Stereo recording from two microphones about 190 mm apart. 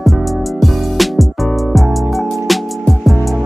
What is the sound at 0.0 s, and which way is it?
Music, centre (ahead or behind).